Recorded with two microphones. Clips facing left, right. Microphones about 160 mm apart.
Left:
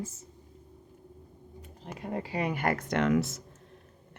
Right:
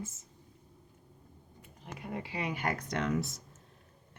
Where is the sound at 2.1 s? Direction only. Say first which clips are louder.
Left 5 dB; 40° left (ahead or behind); by 3.4 s 90° left.